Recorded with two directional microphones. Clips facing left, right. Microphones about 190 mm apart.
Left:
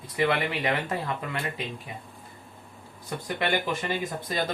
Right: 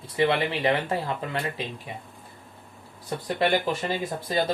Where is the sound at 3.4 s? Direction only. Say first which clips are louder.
Right 4 dB; 30° right (ahead or behind).